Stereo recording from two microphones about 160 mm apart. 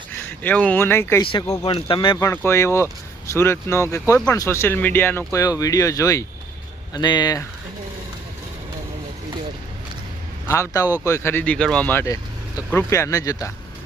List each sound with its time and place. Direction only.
0.2 s speech: 10° left (ahead or behind)
1.2 s speech: 25° left (ahead or behind)
2.1 s speech: 10° left (ahead or behind)
10.5 s speech: 20° left (ahead or behind)